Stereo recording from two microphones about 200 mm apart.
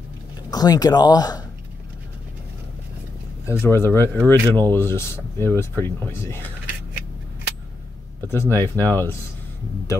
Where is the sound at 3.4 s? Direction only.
15° left (ahead or behind).